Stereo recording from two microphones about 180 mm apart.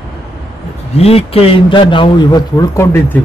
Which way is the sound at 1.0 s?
35° left (ahead or behind).